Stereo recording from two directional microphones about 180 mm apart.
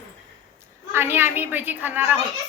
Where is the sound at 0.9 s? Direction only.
10° right (ahead or behind).